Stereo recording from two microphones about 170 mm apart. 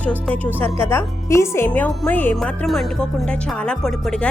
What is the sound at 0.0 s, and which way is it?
Speech, 10° left (ahead or behind).